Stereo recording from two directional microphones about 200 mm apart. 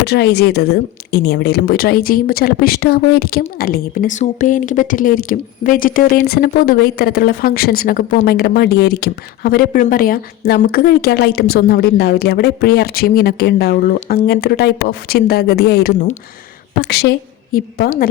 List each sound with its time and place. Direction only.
0.0 s a woman's voice: 55° left (ahead or behind)
16.9 s a woman's voice: 55° left (ahead or behind)